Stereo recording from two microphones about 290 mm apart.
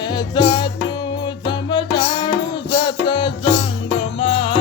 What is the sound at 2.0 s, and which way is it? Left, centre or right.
Music, centre.